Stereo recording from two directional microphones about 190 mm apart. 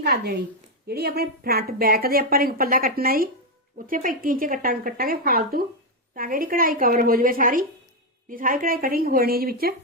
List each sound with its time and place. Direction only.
0.0 s a woman's voice: 60° right (ahead or behind)